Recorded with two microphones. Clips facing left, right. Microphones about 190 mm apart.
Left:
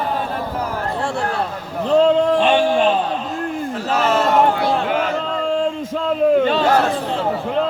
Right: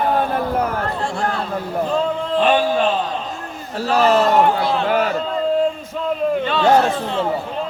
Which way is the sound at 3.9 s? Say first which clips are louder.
Right 4 dB; 35° right (ahead or behind).